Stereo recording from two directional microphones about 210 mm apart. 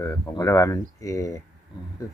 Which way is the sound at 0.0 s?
15° left (ahead or behind).